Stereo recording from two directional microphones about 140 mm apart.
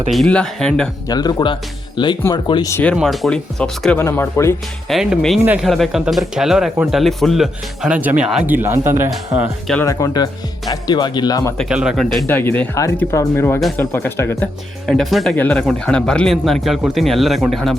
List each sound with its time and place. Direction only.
0.1 s speech: 5° left (ahead or behind)
1.0 s speech: 30° left (ahead or behind)
2.9 s speech: centre (ahead or behind)
4.0 s speech: 20° left (ahead or behind)
4.9 s speech: centre (ahead or behind); by 9.0 s 20° right (ahead or behind)
9.8 s speech: 25° left (ahead or behind)
11.7 s speech: 5° right (ahead or behind)
12.2 s speech: 15° left (ahead or behind)
14.8 s speech: centre (ahead or behind)